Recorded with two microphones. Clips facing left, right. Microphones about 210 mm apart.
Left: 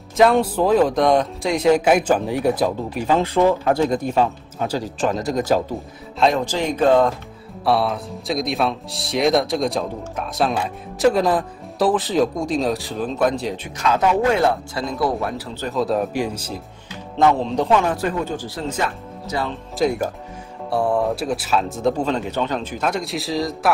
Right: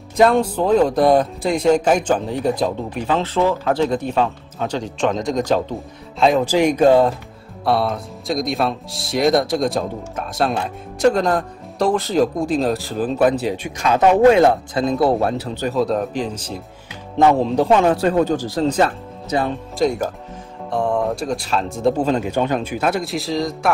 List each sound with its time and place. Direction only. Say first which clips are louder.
0.2 s speech: even; 5° left (ahead or behind); by 7.0 s 10° right (ahead or behind)
7.6 s speech: even; centre (ahead or behind)
14.3 s speech: right 5 dB; 20° right (ahead or behind)
15.7 s speech: even; 5° left (ahead or behind)
17.2 s speech: right 3 dB; 10° right (ahead or behind)
18.0 s speech: right 6 dB; 40° right (ahead or behind)
19.3 s speech: right 5 dB; 20° right (ahead or behind)
19.8 s speech: right 1 dB; centre (ahead or behind)